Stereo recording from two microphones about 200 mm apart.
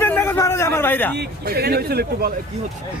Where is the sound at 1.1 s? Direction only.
50° right (ahead or behind).